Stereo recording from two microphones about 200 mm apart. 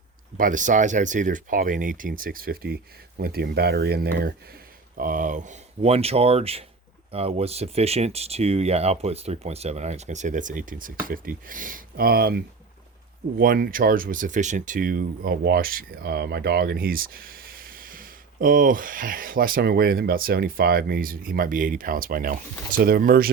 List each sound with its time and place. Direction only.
0.3 s speech: 40° right (ahead or behind)